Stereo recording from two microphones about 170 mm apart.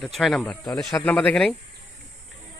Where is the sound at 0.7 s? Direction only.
20° left (ahead or behind).